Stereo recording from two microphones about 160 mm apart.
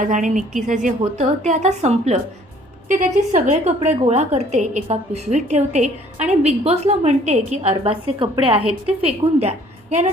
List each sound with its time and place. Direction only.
0.0 s a woman's voice: 55° right (ahead or behind)
3.8 s a woman's voice: 40° right (ahead or behind)